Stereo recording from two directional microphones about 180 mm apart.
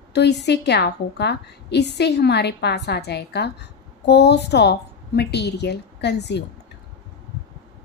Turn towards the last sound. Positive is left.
turn(degrees=70)  # may be behind; listen again after turning